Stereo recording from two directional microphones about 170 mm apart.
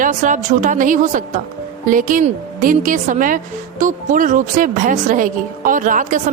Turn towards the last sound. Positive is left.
turn(degrees=-50)  # may be behind; listen again after turning